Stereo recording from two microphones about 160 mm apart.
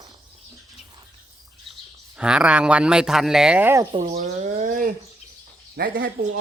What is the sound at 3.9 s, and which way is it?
Speech, 40° right (ahead or behind).